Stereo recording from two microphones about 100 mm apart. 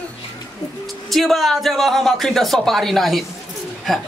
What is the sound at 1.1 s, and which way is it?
Speech, centre (ahead or behind).